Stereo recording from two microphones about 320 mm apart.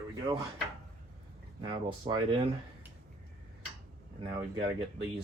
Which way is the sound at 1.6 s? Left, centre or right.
Centre.